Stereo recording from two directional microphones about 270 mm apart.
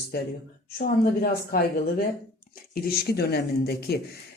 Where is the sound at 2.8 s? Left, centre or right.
Left.